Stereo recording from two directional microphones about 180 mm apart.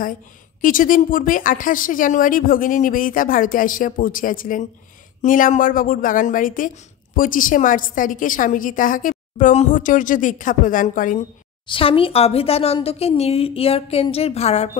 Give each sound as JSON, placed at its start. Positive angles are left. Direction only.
{"t": 0.6, "sound": "speech", "side_deg": 50}
{"t": 11.6, "sound": "speech", "side_deg": 30}